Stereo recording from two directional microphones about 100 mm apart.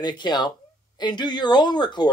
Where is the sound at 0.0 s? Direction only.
45° left (ahead or behind).